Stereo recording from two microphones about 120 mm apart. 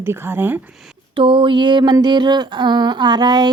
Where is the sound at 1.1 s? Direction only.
45° right (ahead or behind).